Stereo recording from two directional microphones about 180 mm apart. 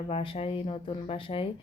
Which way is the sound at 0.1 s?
30° left (ahead or behind).